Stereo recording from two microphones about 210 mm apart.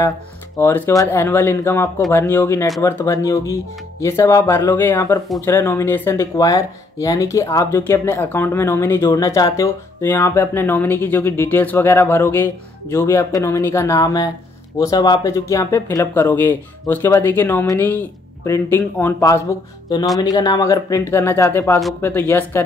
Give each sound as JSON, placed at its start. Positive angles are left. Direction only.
{"t": 0.6, "sound": "speech", "side_deg": 10}